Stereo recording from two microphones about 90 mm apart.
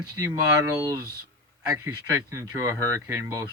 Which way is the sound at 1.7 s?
35° right (ahead or behind).